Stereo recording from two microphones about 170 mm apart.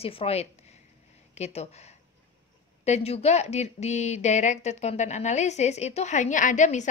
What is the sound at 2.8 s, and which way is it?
Speech, 40° left (ahead or behind).